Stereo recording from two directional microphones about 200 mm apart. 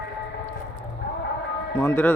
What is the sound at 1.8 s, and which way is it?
Speech, 10° left (ahead or behind).